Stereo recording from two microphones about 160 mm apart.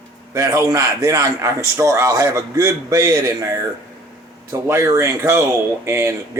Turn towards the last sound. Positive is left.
turn(degrees=-15)  # may be behind; listen again after turning